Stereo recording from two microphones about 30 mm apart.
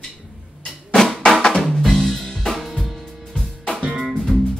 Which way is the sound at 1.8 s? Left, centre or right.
Centre.